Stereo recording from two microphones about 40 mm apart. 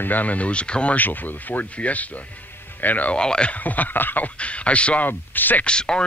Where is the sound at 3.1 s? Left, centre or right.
Left.